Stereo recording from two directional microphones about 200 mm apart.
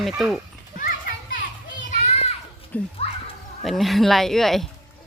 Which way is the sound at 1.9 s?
30° left (ahead or behind).